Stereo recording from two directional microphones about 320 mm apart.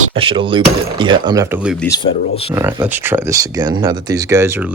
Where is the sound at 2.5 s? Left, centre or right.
Centre.